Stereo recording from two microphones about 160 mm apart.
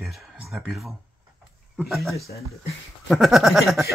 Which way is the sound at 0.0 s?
Centre (ahead or behind).